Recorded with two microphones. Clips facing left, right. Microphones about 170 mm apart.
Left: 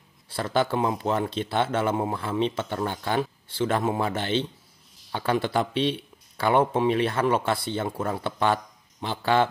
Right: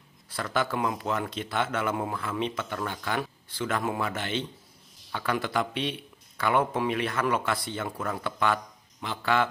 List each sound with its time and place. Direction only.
0.3 s speech: 30° left (ahead or behind)